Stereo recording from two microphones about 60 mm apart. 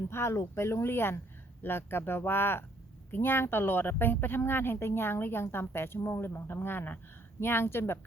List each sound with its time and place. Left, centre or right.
0.1 s a woman's voice: left